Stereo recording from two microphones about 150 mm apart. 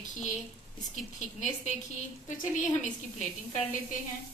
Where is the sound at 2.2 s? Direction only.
55° left (ahead or behind).